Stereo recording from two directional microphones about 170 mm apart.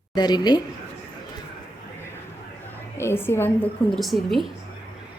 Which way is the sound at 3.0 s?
15° left (ahead or behind).